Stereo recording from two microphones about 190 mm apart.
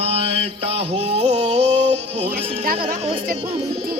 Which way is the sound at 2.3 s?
35° right (ahead or behind).